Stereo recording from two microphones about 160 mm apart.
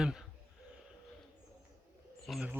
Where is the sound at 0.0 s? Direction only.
5° right (ahead or behind).